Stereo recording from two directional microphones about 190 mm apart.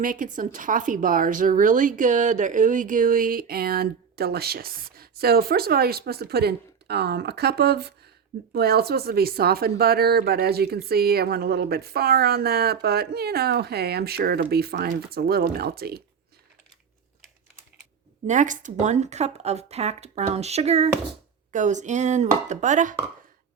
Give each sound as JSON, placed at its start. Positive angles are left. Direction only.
{"t": 0.0, "sound": "a woman's voice", "side_deg": -45}
{"t": 18.3, "sound": "speech", "side_deg": -40}